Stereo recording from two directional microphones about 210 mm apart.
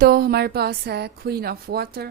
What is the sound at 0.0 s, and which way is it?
A woman's voice, 45° right (ahead or behind).